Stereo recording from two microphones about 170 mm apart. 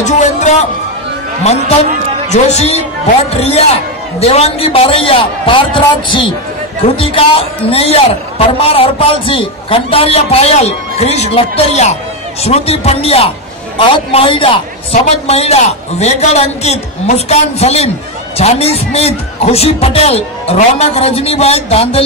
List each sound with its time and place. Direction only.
0.0 s a man's voice: 45° left (ahead or behind)